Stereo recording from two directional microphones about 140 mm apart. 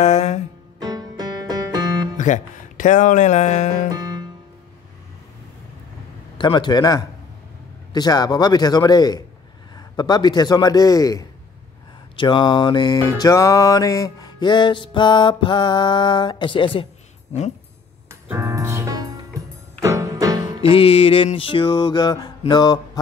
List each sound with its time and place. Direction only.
0.0 s music: 55° left (ahead or behind)
0.7 s music: 25° right (ahead or behind)
2.1 s speech: 60° left (ahead or behind)
3.9 s music: 25° right (ahead or behind)
6.3 s music: 35° left (ahead or behind)
7.9 s a man's voice: 30° left (ahead or behind)
12.2 s music: 35° left (ahead or behind)
17.3 s speech: 50° left (ahead or behind)
18.3 s music: 20° right (ahead or behind)
20.6 s music: 45° left (ahead or behind)